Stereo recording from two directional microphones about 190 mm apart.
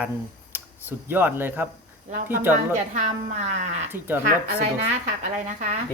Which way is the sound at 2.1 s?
45° right (ahead or behind).